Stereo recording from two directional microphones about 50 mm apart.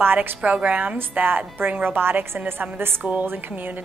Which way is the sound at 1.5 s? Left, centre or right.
Right.